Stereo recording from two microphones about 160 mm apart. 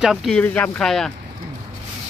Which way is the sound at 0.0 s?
Centre (ahead or behind).